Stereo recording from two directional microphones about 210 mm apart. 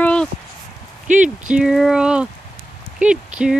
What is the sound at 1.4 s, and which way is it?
Speech, 5° right (ahead or behind).